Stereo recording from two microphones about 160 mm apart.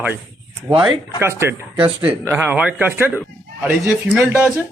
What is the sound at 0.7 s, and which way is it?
Speech, 30° right (ahead or behind).